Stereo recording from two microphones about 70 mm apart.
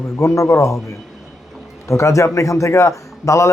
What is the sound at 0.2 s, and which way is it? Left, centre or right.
Speech, left.